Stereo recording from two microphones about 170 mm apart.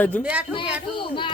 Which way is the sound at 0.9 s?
30° left (ahead or behind).